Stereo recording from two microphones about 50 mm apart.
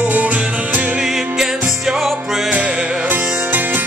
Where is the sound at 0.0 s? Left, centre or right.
Right.